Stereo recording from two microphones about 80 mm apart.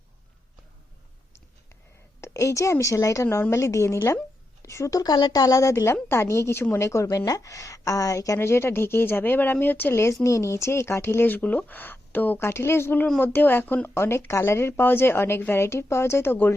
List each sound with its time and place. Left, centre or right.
2.2 s a woman's voice: left
8.4 s a woman's voice: left